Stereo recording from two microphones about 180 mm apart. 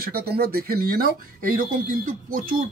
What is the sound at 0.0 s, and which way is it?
Speech, 60° right (ahead or behind).